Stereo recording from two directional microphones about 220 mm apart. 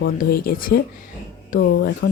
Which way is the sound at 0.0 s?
45° left (ahead or behind).